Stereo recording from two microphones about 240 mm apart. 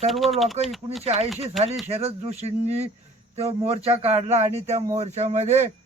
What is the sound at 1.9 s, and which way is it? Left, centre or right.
Speech, right.